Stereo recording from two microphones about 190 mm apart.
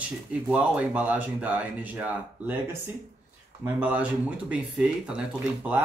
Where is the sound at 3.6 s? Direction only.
10° right (ahead or behind).